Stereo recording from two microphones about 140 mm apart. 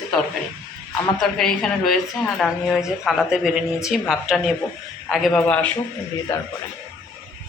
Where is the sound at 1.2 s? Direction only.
5° left (ahead or behind).